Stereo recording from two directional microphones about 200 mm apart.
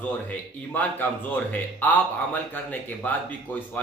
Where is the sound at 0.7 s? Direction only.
10° left (ahead or behind).